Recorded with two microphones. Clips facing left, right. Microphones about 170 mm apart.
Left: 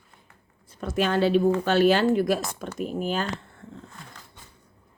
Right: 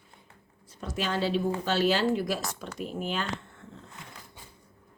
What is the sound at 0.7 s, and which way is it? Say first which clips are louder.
A woman's voice: left 7 dB; 55° left (ahead or behind).